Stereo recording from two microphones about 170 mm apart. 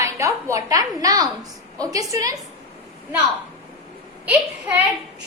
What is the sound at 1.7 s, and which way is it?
Speech, 20° right (ahead or behind).